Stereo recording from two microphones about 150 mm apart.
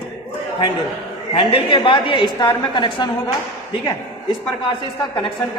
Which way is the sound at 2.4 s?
20° left (ahead or behind).